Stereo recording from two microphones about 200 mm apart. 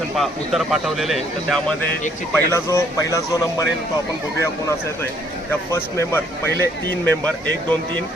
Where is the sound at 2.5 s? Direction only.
15° left (ahead or behind).